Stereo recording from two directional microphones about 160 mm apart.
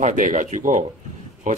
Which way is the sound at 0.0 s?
55° right (ahead or behind).